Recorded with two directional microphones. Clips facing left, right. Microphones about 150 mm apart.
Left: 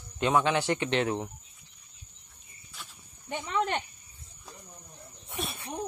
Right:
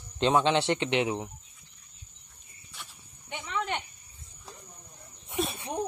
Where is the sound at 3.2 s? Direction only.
40° left (ahead or behind).